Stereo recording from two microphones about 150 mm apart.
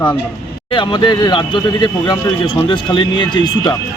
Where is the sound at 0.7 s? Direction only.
35° left (ahead or behind).